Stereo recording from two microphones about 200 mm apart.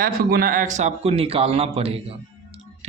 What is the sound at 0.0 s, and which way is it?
A man's voice, 45° right (ahead or behind).